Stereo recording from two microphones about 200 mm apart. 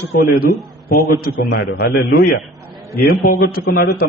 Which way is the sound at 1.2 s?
55° left (ahead or behind).